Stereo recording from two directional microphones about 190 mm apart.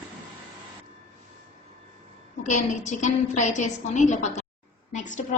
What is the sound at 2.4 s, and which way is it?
A woman's voice, 40° left (ahead or behind).